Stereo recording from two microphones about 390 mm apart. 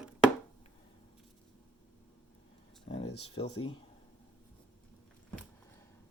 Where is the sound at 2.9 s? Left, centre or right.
Centre.